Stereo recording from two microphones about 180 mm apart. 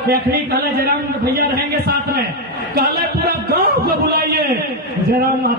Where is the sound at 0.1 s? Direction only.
60° right (ahead or behind).